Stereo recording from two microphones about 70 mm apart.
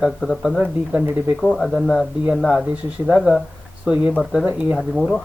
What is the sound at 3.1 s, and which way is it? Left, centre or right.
Speech, centre.